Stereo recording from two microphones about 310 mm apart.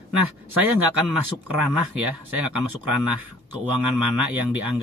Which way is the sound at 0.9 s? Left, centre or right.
Centre.